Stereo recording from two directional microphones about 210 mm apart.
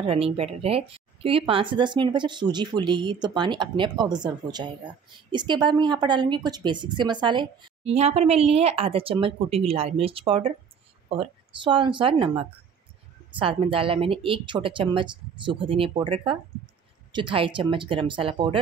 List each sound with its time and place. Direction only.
0.0 s a woman's voice: 30° right (ahead or behind)